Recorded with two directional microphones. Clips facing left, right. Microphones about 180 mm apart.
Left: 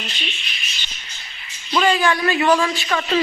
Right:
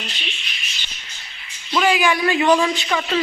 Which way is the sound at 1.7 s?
10° right (ahead or behind).